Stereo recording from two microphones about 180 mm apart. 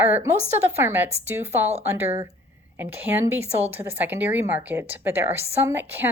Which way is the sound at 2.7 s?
10° right (ahead or behind).